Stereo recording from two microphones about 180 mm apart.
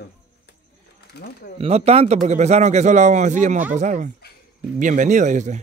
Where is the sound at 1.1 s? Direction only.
60° left (ahead or behind).